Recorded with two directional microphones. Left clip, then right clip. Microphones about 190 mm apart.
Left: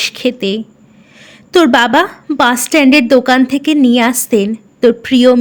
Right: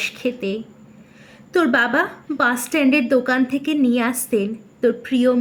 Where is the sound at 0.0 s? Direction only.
45° left (ahead or behind).